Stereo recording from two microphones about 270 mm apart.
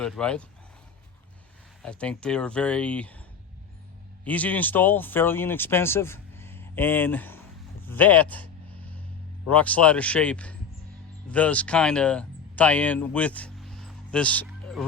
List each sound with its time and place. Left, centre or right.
0.0 s speech: centre
1.8 s speech: centre
4.2 s speech: centre
9.5 s speech: centre